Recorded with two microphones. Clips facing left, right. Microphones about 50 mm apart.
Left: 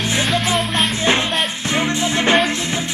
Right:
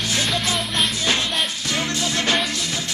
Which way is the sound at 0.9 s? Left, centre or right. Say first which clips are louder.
Left 4 dB; left.